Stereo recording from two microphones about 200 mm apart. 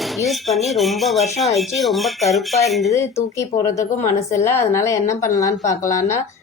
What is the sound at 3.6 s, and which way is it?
A woman's voice, 15° left (ahead or behind).